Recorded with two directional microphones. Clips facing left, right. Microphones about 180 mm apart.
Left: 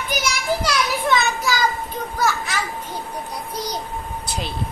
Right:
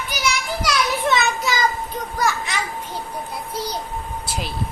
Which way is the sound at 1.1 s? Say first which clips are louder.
Even; centre (ahead or behind).